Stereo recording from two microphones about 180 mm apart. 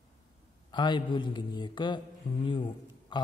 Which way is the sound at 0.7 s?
25° left (ahead or behind).